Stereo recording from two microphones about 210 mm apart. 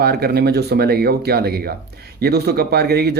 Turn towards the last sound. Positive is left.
turn(degrees=-50)  # may be behind; listen again after turning